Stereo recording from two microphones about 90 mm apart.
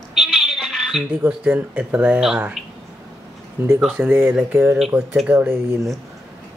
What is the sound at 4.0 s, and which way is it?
Speech, 20° right (ahead or behind).